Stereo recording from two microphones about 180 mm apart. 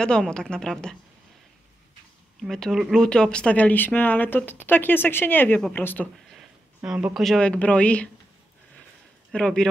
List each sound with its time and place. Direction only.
0.0 s a woman's voice: 5° left (ahead or behind)
2.4 s speech: centre (ahead or behind)
6.3 s speech: 5° right (ahead or behind)
9.3 s a woman's voice: 5° left (ahead or behind)